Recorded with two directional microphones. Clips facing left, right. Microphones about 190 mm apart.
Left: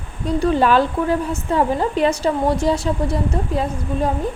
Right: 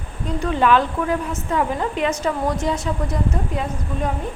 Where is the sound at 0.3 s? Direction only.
35° left (ahead or behind).